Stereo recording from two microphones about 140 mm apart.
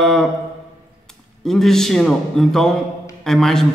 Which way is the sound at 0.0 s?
Centre (ahead or behind).